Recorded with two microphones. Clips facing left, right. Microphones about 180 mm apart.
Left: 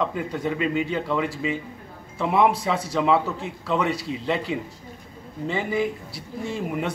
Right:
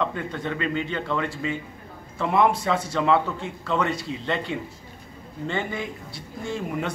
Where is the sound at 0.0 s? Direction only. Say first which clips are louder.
Left 2 dB; 5° left (ahead or behind).